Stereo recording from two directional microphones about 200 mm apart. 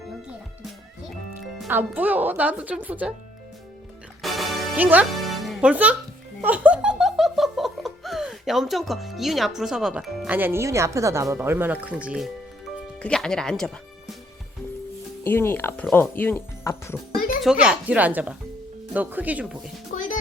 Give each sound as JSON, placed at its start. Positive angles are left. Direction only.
{"t": 1.6, "sound": "speech", "side_deg": -10}
{"t": 4.2, "sound": "music", "side_deg": 0}
{"t": 6.4, "sound": "laughter", "side_deg": -10}
{"t": 9.6, "sound": "speech", "side_deg": 0}
{"t": 15.2, "sound": "speech", "side_deg": 10}
{"t": 17.4, "sound": "speech", "side_deg": -5}
{"t": 19.9, "sound": "music", "side_deg": 40}